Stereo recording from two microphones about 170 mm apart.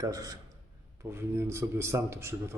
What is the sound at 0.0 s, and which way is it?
A man's voice, 20° right (ahead or behind).